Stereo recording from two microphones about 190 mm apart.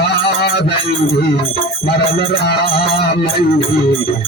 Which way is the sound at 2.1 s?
60° left (ahead or behind).